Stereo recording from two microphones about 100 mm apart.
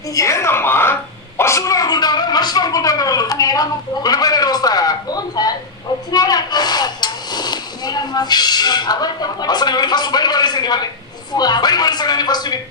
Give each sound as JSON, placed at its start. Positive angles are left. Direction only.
{"t": 0.1, "sound": "speech", "side_deg": 30}